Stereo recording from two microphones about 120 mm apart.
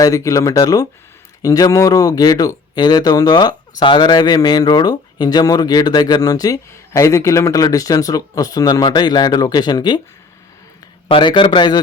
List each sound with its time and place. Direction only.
0.0 s speech: 25° left (ahead or behind)
11.1 s speech: 40° left (ahead or behind)